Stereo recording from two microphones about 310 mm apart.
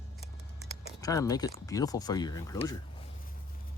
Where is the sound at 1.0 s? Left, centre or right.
Centre.